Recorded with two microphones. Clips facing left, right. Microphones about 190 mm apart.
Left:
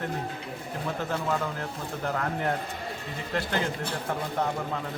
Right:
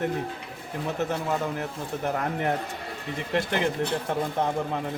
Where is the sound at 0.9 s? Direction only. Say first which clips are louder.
Right 2 dB; 20° right (ahead or behind).